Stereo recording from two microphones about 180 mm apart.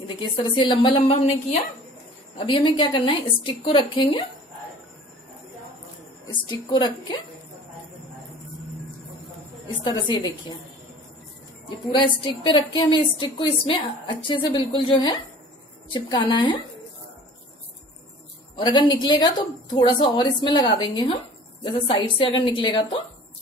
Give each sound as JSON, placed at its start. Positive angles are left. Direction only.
{"t": 0.1, "sound": "a woman's voice", "side_deg": 25}
{"t": 6.7, "sound": "a woman's voice", "side_deg": 25}
{"t": 9.8, "sound": "a woman's voice", "side_deg": 25}
{"t": 11.9, "sound": "a woman's voice", "side_deg": 25}
{"t": 18.6, "sound": "a woman's voice", "side_deg": 25}